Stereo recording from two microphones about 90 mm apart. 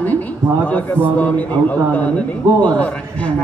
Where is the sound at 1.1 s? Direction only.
15° left (ahead or behind).